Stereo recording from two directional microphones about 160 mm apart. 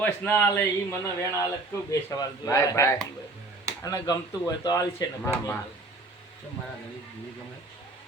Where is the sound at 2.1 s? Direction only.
20° left (ahead or behind).